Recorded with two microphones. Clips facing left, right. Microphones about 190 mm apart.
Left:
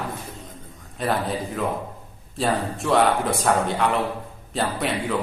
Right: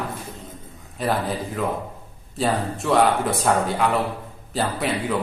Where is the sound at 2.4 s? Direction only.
Centre (ahead or behind).